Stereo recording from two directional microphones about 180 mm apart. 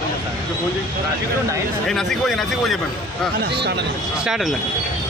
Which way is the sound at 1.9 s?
Centre (ahead or behind).